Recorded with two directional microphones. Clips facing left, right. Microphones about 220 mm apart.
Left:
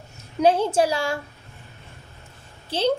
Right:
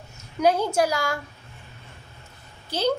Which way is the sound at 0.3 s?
30° left (ahead or behind).